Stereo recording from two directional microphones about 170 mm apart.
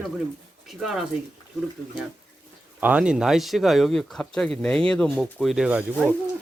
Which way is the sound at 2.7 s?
10° right (ahead or behind).